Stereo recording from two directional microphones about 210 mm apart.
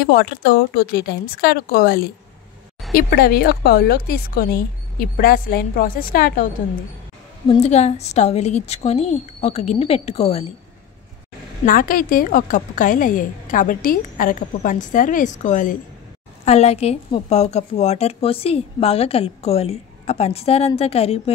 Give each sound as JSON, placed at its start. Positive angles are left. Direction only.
{"t": 0.0, "sound": "a woman's voice", "side_deg": 50}
{"t": 7.4, "sound": "a woman's voice", "side_deg": 30}
{"t": 11.6, "sound": "a woman's voice", "side_deg": 40}